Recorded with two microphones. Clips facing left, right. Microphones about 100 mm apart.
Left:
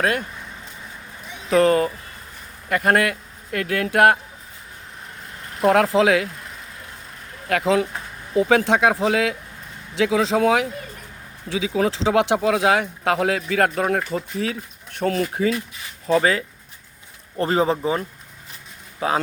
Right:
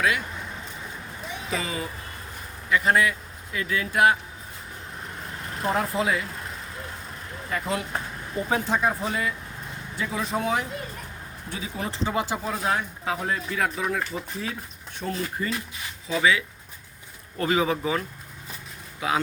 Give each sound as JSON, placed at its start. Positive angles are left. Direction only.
{"t": 0.0, "sound": "speech", "side_deg": 50}
{"t": 1.5, "sound": "speech", "side_deg": 65}
{"t": 5.6, "sound": "speech", "side_deg": 90}
{"t": 7.4, "sound": "speech", "side_deg": 85}
{"t": 8.4, "sound": "speech", "side_deg": 75}
{"t": 16.0, "sound": "speech", "side_deg": 45}
{"t": 17.3, "sound": "speech", "side_deg": 35}